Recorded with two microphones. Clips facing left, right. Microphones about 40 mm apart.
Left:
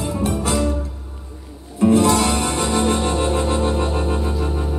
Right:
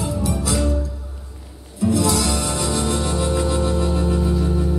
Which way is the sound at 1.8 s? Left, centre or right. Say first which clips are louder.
Left 5 dB; left.